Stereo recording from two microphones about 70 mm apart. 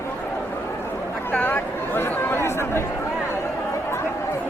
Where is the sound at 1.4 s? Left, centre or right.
Left.